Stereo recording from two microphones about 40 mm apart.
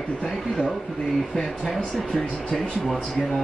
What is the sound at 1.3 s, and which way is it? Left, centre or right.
Speech, centre.